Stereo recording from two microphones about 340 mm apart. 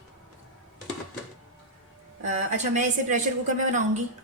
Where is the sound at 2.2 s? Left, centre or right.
Right.